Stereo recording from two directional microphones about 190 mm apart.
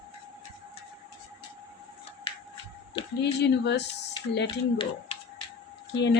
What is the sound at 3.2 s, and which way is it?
Speech, 65° left (ahead or behind).